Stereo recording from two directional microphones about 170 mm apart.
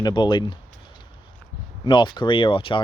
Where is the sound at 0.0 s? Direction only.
25° left (ahead or behind).